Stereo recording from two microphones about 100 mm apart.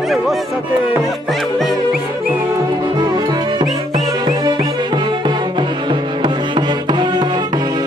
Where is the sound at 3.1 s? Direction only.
45° right (ahead or behind).